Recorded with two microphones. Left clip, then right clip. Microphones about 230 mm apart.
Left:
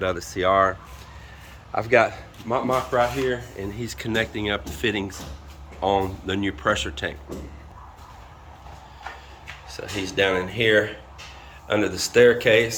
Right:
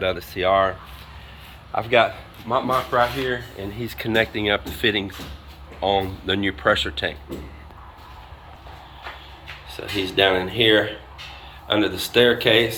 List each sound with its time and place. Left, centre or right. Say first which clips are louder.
0.0 s speech: right 1 dB; centre
9.7 s speech: right 3 dB; centre